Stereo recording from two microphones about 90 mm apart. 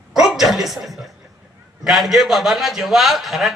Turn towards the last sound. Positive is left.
turn(degrees=0)  # may be behind; listen again after turning